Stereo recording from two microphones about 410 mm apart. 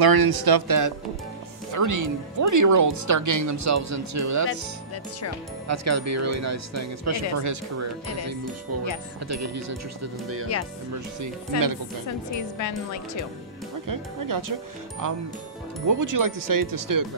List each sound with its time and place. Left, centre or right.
0.0 s speech: right
5.7 s speech: right
11.1 s speech: right
12.5 s speech: left
13.8 s speech: right